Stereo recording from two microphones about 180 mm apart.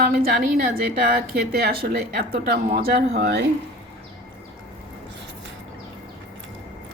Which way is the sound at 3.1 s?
70° right (ahead or behind).